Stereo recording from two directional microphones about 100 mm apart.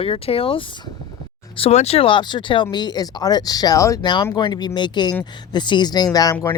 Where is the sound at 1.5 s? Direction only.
85° left; by 4.0 s 35° left (ahead or behind).